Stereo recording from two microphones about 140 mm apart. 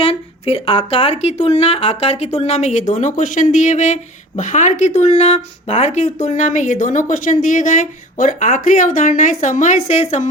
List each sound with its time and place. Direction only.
0.0 s speech: 45° left (ahead or behind)